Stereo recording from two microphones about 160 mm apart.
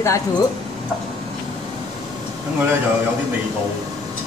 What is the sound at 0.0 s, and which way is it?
Speech, 20° left (ahead or behind).